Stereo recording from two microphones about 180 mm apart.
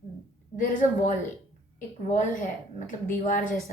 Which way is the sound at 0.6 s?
45° left (ahead or behind).